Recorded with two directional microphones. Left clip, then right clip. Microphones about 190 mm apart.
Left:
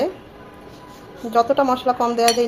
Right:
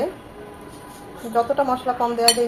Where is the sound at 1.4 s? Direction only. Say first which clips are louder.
Left 3 dB; 45° left (ahead or behind).